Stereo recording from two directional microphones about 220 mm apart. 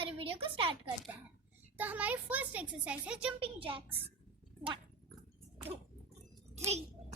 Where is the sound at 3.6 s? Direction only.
25° right (ahead or behind).